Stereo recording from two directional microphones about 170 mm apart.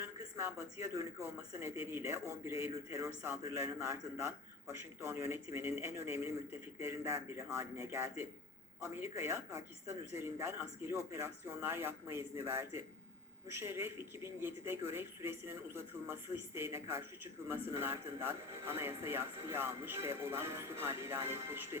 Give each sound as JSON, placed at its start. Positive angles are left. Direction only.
{"t": 0.0, "sound": "a man's voice", "side_deg": -15}